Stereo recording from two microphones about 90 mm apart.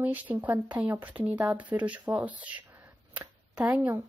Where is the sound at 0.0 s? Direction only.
20° right (ahead or behind).